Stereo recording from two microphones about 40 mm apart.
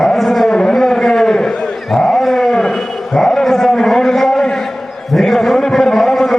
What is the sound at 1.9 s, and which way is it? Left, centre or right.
Dog, centre.